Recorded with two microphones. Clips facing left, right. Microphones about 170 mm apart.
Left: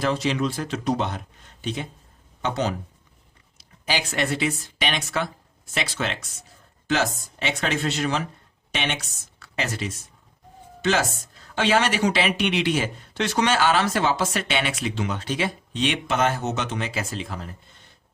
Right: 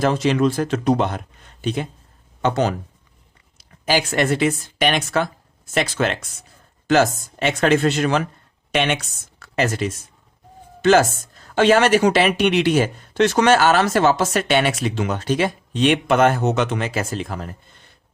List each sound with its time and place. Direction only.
0.0 s speech: 50° right (ahead or behind)
9.4 s speech: 50° right (ahead or behind)
11.5 s speech: 50° right (ahead or behind)